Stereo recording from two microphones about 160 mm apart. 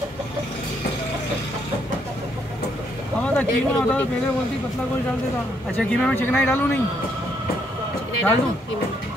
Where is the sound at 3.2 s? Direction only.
10° left (ahead or behind).